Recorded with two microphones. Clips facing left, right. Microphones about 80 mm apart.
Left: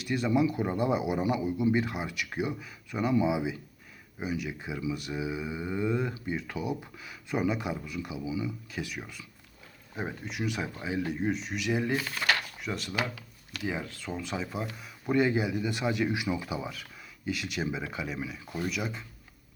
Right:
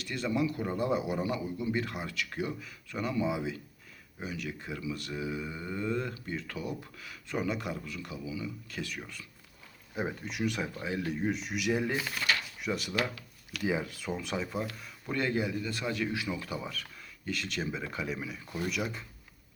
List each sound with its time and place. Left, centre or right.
0.0 s speech: centre
8.7 s speech: centre
9.9 s speech: centre